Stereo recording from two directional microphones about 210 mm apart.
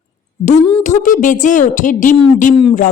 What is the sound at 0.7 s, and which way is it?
A woman's voice, 35° left (ahead or behind).